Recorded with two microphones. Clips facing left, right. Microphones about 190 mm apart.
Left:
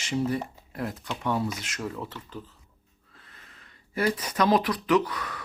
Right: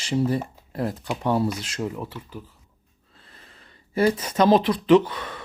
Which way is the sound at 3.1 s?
30° right (ahead or behind).